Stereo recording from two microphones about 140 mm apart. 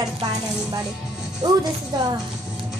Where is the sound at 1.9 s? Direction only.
30° right (ahead or behind).